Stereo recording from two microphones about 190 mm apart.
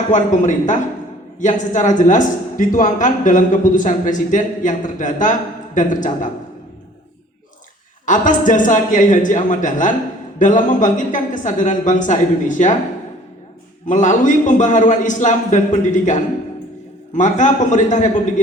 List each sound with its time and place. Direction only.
0.1 s a woman's voice: 40° left (ahead or behind)
8.0 s a woman's voice: 45° left (ahead or behind)
13.8 s a woman's voice: 40° left (ahead or behind)